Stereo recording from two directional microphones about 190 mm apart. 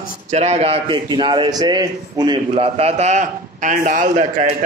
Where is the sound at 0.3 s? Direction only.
35° right (ahead or behind).